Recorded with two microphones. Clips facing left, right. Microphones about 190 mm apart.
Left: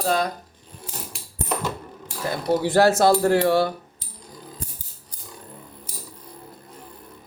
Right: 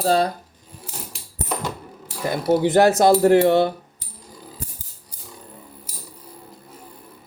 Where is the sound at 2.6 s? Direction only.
20° right (ahead or behind).